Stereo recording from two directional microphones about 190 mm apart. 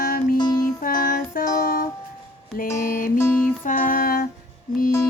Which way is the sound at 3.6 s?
45° left (ahead or behind).